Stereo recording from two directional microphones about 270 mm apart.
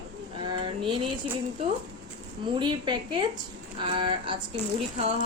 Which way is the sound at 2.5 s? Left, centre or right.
Centre.